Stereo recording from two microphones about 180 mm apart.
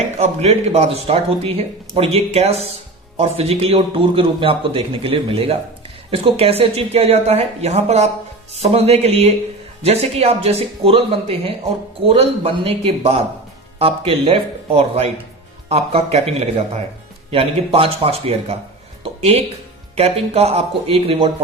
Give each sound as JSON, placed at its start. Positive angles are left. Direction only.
{"t": 0.2, "sound": "speech", "side_deg": -35}